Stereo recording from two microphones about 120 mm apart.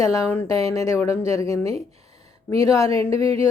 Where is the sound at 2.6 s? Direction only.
25° left (ahead or behind).